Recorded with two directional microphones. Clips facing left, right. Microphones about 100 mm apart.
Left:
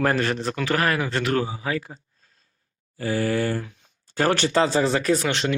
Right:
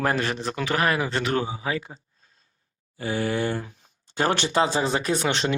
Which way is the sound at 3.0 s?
20° right (ahead or behind).